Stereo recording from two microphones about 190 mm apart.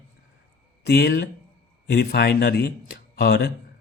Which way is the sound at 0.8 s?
60° left (ahead or behind).